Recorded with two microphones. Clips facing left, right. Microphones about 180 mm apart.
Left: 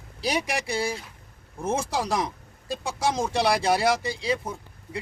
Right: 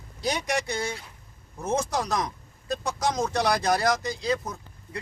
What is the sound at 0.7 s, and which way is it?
A man's voice, 30° left (ahead or behind).